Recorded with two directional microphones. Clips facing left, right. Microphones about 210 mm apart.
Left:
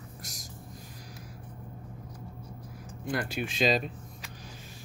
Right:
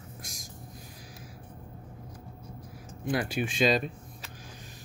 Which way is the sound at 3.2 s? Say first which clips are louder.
Right 1 dB; 50° right (ahead or behind).